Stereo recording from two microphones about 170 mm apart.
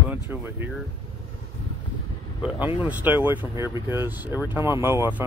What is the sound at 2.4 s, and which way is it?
Speech, 10° right (ahead or behind).